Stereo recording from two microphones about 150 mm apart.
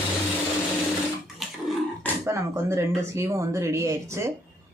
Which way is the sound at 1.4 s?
Centre (ahead or behind).